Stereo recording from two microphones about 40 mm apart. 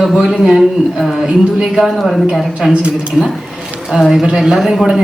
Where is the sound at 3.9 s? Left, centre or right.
Centre.